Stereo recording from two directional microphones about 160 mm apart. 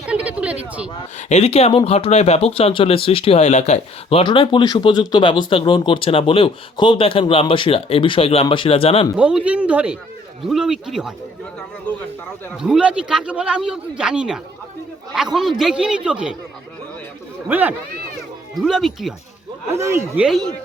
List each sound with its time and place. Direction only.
0.0 s a sound: 5° right (ahead or behind)
1.3 s speech: 40° left (ahead or behind)
9.1 s a man's voice: 5° right (ahead or behind)
11.9 s speech: 10° left (ahead or behind)
12.5 s a man's voice: 5° right (ahead or behind)
17.5 s speech: 10° right (ahead or behind)
18.5 s a man's voice: centre (ahead or behind)
19.7 s speech: 15° right (ahead or behind)
20.2 s a man's voice: centre (ahead or behind)